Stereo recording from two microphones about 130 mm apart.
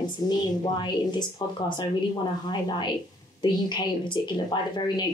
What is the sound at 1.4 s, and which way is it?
Speech, 35° left (ahead or behind).